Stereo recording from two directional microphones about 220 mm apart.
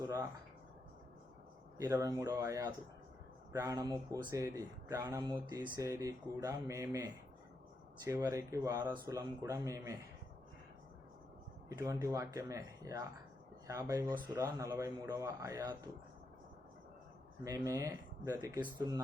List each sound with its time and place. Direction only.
0.0 s a sound: 10° right (ahead or behind)
1.8 s speech: 15° right (ahead or behind)
11.7 s speech: 15° right (ahead or behind)
17.4 s speech: 15° right (ahead or behind)